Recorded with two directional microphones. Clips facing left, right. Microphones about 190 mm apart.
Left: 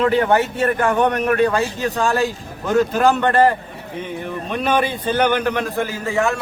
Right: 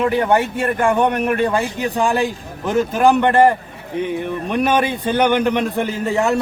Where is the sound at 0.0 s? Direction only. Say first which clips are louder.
Even; 15° right (ahead or behind).